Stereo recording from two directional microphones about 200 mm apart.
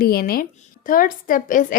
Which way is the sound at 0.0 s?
50° left (ahead or behind).